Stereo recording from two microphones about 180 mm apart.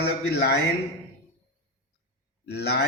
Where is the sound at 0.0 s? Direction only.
70° left (ahead or behind).